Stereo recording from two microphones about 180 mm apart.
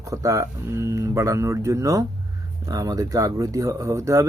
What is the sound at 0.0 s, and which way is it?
Speech, 20° right (ahead or behind).